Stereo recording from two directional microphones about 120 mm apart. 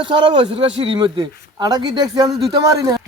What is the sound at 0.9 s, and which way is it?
Speech, 40° right (ahead or behind).